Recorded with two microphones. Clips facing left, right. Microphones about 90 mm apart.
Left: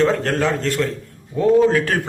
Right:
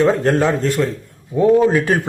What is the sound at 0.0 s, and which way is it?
A man's voice, 15° right (ahead or behind).